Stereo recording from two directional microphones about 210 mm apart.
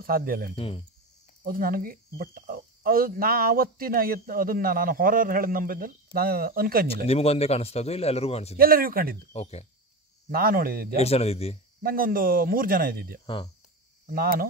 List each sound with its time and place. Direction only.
0.0 s speech: 45° right (ahead or behind)
0.6 s a man's voice: 25° left (ahead or behind)
1.4 s speech: 45° right (ahead or behind)
7.1 s a man's voice: 30° left (ahead or behind)
8.5 s speech: 45° right (ahead or behind)
9.3 s speech: 30° left (ahead or behind)
10.3 s speech: 45° right (ahead or behind)
11.0 s a man's voice: 30° left (ahead or behind)
11.8 s speech: 45° right (ahead or behind)